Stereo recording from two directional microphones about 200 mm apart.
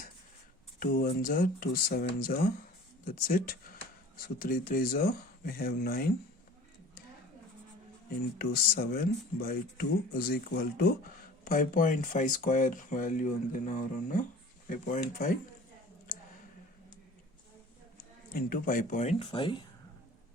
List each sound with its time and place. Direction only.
0.8 s speech: 45° left (ahead or behind)
8.4 s speech: 50° left (ahead or behind)
18.3 s speech: 45° left (ahead or behind); by 19.6 s 25° left (ahead or behind)